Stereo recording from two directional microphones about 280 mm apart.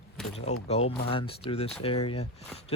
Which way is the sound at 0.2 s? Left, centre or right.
Centre.